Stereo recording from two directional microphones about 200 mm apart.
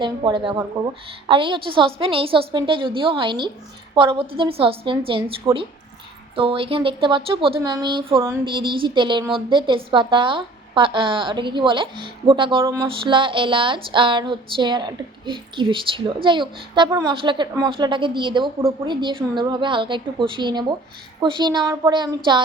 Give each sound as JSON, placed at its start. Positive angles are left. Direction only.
{"t": 0.0, "sound": "speech", "side_deg": -25}